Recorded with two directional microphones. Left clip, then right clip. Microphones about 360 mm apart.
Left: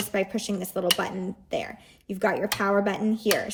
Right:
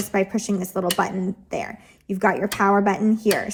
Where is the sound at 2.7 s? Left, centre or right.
Centre.